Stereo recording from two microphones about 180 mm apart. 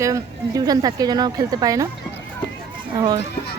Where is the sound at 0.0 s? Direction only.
20° right (ahead or behind).